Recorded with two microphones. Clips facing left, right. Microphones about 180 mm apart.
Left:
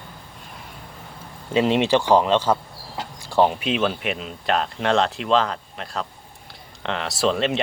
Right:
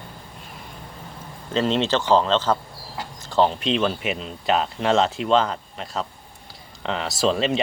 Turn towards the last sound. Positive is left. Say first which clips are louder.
# even
turn(degrees=0)  # may be behind; listen again after turning